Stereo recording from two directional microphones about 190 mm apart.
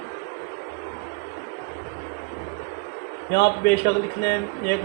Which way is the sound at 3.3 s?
60° left (ahead or behind).